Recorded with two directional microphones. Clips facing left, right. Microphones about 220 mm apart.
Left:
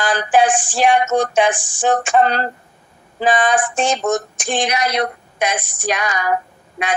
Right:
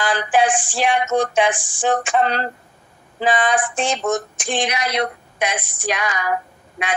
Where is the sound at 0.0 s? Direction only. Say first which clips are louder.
Left 3 dB; 45° left (ahead or behind).